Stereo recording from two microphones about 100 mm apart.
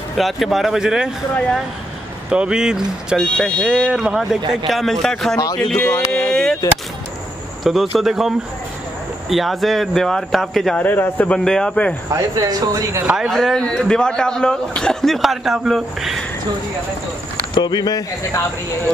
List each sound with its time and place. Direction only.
0.2 s a man's voice: centre (ahead or behind)
2.3 s speech: 10° right (ahead or behind)
3.2 s a man's voice: 5° left (ahead or behind)
3.7 s a man's voice: 5° right (ahead or behind)
7.6 s a man's voice: centre (ahead or behind)
10.8 s a man's voice: 20° left (ahead or behind)
11.3 s a man's voice: 5° left (ahead or behind)
12.1 s speech: 40° right (ahead or behind)
13.0 s speech: 10° right (ahead or behind)
13.3 s a man's voice: centre (ahead or behind)
17.6 s speech: 45° left (ahead or behind)